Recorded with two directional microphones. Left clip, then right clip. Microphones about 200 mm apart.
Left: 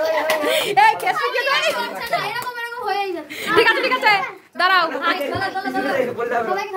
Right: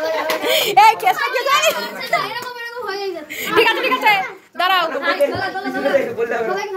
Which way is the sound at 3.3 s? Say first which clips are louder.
Even; 15° left (ahead or behind).